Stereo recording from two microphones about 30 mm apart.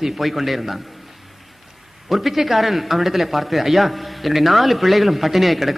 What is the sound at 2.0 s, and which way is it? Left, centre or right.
A man's voice, centre.